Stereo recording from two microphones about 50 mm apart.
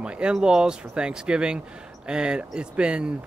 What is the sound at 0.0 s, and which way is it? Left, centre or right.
Speech, centre.